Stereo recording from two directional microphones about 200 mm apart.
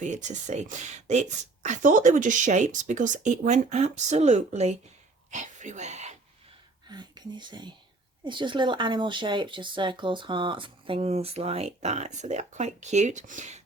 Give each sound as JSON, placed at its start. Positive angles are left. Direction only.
{"t": 0.0, "sound": "speech", "side_deg": -35}
{"t": 6.8, "sound": "speech", "side_deg": -20}